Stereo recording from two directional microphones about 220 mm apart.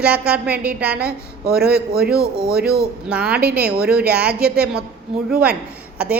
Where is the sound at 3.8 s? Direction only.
5° right (ahead or behind).